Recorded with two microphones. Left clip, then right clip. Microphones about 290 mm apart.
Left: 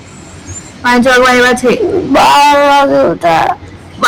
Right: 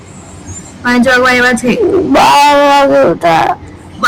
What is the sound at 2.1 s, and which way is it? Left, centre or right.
Speech, centre.